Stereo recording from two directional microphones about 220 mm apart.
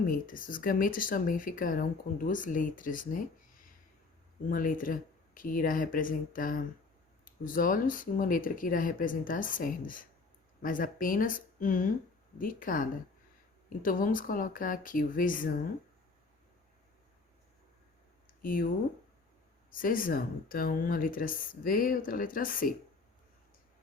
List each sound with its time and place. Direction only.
0.0 s speech: 40° left (ahead or behind)
4.4 s speech: 40° left (ahead or behind)
18.3 s a sound: 40° left (ahead or behind)
19.7 s speech: 40° left (ahead or behind)